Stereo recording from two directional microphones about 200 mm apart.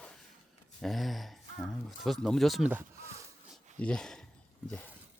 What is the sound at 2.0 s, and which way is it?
Speech, centre (ahead or behind).